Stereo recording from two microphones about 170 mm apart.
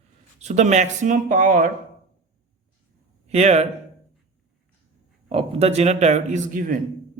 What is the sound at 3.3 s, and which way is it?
Speech, 40° right (ahead or behind).